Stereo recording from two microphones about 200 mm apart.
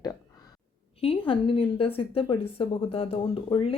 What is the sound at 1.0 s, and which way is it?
A woman's voice, 25° left (ahead or behind).